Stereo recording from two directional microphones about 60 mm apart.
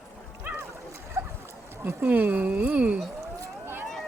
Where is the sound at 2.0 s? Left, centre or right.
Right.